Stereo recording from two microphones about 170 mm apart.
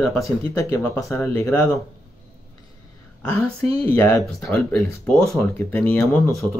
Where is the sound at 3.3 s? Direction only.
10° left (ahead or behind).